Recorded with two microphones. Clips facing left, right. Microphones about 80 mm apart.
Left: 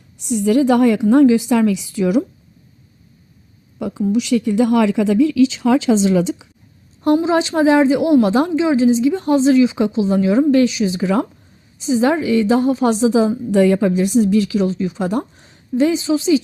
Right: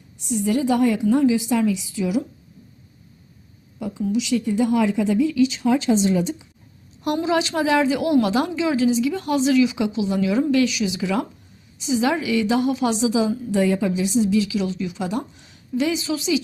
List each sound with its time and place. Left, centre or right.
0.2 s a woman's voice: left
3.8 s a sound: left
4.1 s speech: left
7.0 s a woman's voice: left